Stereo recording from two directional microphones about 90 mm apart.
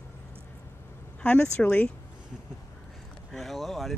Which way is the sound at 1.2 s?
15° left (ahead or behind).